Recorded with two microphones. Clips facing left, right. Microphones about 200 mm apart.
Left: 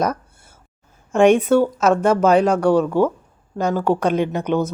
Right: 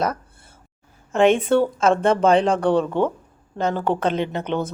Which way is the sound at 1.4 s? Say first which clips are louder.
Left 2 dB; 5° left (ahead or behind).